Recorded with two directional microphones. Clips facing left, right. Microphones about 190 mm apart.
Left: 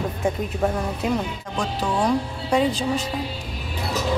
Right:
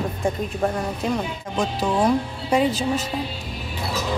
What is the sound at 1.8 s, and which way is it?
Speech, 5° right (ahead or behind).